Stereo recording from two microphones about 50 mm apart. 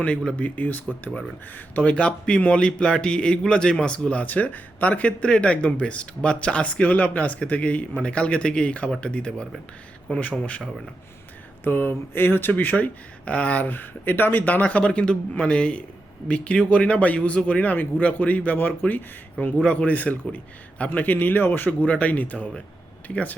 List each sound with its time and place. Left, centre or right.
0.3 s a man's voice: left
11.6 s a man's voice: left
19.6 s a man's voice: left
21.7 s a man's voice: left